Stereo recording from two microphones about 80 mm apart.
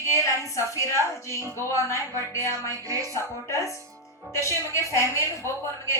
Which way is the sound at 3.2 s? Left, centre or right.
Left.